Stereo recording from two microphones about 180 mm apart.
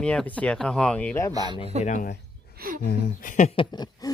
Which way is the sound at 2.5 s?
55° right (ahead or behind).